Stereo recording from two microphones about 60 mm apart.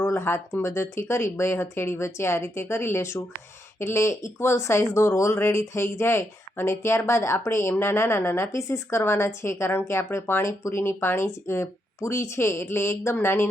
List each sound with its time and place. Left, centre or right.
0.0 s a sound: left
0.6 s speech: left
8.5 s speech: left